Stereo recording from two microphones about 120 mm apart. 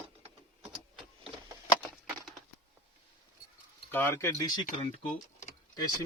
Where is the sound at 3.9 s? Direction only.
20° left (ahead or behind).